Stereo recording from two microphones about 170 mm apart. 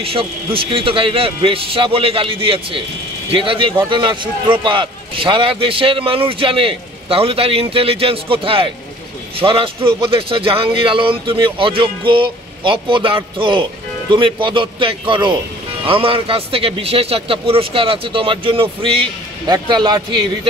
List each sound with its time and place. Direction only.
0.0 s a man's voice: 35° right (ahead or behind)